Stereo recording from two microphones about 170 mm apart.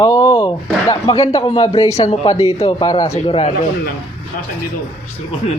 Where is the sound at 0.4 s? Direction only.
25° left (ahead or behind).